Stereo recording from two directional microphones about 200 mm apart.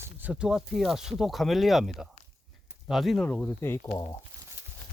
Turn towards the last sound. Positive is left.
turn(degrees=15)  # may be behind; listen again after turning